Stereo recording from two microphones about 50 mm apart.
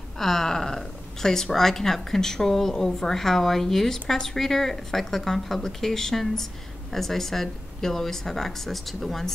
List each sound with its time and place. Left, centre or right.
0.2 s a woman's voice: centre